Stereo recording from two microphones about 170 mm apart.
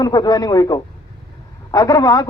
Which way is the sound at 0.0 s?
25° left (ahead or behind).